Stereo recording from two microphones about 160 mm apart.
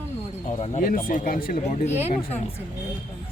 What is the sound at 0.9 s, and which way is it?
Speech, 65° left (ahead or behind).